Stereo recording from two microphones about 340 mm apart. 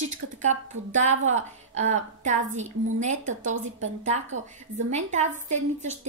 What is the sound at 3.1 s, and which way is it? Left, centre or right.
A woman's voice, right.